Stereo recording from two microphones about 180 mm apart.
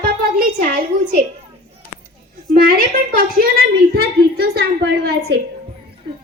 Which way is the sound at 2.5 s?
55° right (ahead or behind).